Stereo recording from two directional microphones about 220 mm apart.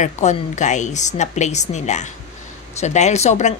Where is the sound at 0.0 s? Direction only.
30° left (ahead or behind).